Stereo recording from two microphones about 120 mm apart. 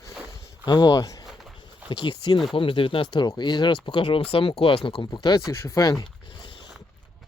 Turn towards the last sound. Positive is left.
turn(degrees=45)  # may be behind; listen again after turning